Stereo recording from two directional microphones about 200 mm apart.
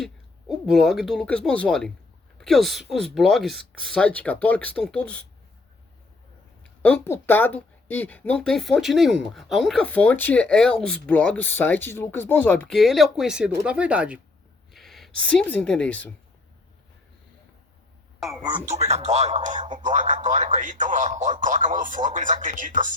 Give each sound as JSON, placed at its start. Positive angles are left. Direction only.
{"t": 0.0, "sound": "speech", "side_deg": 0}
{"t": 6.8, "sound": "a woman's voice", "side_deg": 10}
{"t": 18.7, "sound": "a man's voice", "side_deg": -35}